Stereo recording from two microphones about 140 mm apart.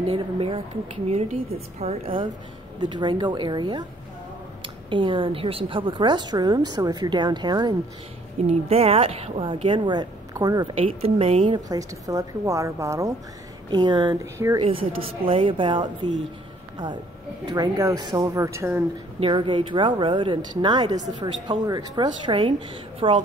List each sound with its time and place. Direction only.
0.1 s a woman's voice: 40° right (ahead or behind)
2.8 s a woman's voice: 35° right (ahead or behind)
4.8 s a woman's voice: 35° right (ahead or behind)
8.5 s a woman's voice: 45° right (ahead or behind); by 10.7 s 25° right (ahead or behind)
10.8 s speech: 40° right (ahead or behind); by 13.1 s 20° right (ahead or behind)
13.7 s a woman's voice: 35° right (ahead or behind)
15.2 s a woman's voice: 40° right (ahead or behind); by 18.9 s 15° right (ahead or behind)
19.1 s a woman's voice: 40° right (ahead or behind)